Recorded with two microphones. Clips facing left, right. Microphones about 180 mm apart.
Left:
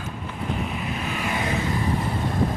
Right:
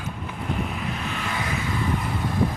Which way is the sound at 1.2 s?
20° left (ahead or behind).